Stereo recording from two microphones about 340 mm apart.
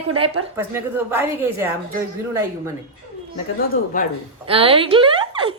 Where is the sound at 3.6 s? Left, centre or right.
Left.